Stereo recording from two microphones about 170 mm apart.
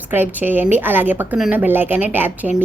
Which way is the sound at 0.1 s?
10° right (ahead or behind).